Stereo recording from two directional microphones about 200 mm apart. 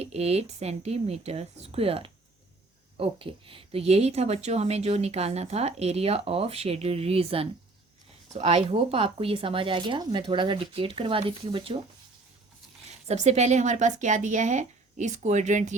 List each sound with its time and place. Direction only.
0.0 s a woman's voice: 30° right (ahead or behind)
13.1 s speech: 35° right (ahead or behind)